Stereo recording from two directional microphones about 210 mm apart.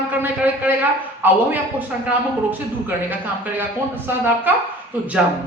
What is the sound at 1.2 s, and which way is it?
Speech, 10° right (ahead or behind).